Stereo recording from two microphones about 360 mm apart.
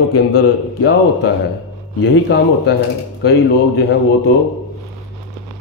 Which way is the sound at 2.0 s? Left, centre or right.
Left.